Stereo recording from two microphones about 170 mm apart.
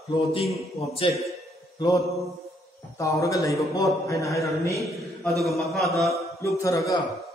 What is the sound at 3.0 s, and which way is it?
A man's voice, 20° left (ahead or behind).